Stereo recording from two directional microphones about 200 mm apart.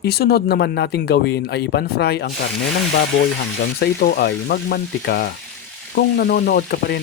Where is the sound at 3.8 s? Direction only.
50° left (ahead or behind).